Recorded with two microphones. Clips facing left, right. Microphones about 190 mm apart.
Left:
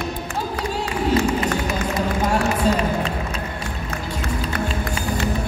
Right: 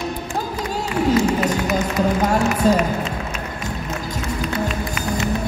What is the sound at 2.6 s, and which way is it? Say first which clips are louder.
Music: right 5 dB; 45° right (ahead or behind).